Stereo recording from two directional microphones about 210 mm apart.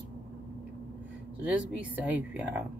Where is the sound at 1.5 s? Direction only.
5° right (ahead or behind).